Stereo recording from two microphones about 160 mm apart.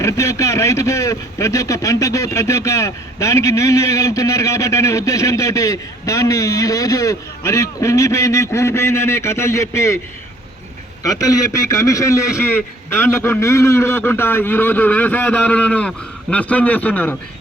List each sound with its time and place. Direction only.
0.0 s a man's voice: 20° left (ahead or behind)
11.0 s a man's voice: 20° left (ahead or behind)